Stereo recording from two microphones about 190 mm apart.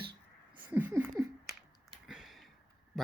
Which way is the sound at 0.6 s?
10° right (ahead or behind).